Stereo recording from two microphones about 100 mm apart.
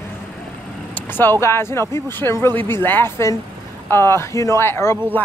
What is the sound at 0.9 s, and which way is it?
Vehicle, 20° left (ahead or behind).